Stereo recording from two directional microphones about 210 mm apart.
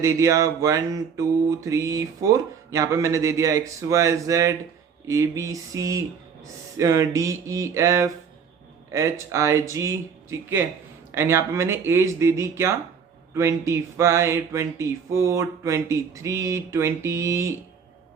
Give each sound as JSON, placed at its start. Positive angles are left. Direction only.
{"t": 0.0, "sound": "mantra", "side_deg": -15}